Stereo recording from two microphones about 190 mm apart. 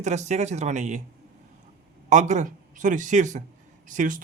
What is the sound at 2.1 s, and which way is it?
Speech, 40° right (ahead or behind).